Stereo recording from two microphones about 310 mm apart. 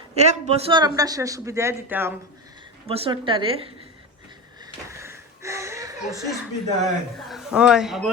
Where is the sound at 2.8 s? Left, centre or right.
Centre.